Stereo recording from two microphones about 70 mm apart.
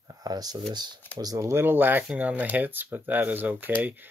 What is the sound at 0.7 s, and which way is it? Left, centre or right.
Speech, right.